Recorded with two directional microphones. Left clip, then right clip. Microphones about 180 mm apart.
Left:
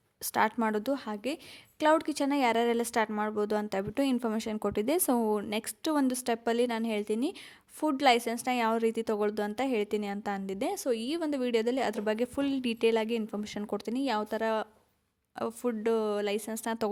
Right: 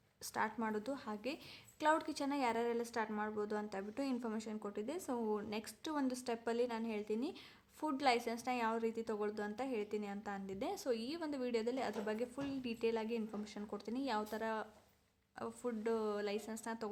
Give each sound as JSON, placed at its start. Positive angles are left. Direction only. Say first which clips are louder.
{"t": 0.2, "sound": "a woman's voice", "louder": "left 12 dB", "side_deg": 50}